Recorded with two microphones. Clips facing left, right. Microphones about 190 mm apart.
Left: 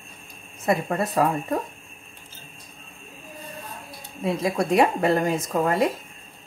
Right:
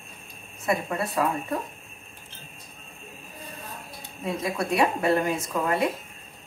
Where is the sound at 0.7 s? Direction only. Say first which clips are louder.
Left 3 dB; 45° left (ahead or behind).